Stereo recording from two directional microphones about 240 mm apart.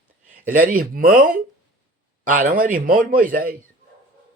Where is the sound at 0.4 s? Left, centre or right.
Right.